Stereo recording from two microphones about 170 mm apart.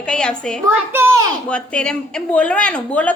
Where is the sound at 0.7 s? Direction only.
15° right (ahead or behind).